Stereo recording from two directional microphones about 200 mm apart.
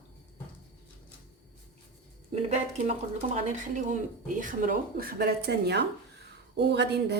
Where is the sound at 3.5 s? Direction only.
40° right (ahead or behind).